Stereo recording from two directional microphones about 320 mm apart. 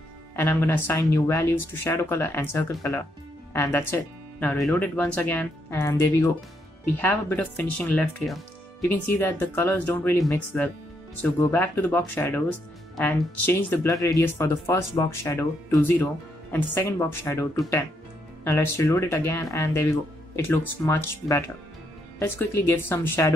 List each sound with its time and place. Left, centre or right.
0.4 s speech: centre
17.2 s speech: centre